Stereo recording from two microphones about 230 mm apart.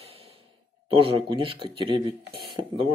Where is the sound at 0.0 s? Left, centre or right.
Right.